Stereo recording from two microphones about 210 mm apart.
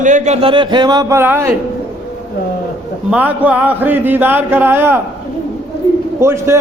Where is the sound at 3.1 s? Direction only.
5° right (ahead or behind).